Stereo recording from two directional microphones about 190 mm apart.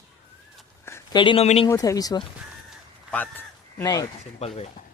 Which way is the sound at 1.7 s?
20° left (ahead or behind).